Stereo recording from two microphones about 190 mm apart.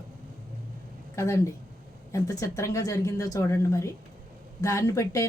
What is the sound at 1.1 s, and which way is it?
Speech, 15° left (ahead or behind).